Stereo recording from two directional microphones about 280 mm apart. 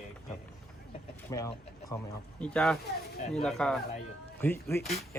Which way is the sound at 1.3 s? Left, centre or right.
Centre.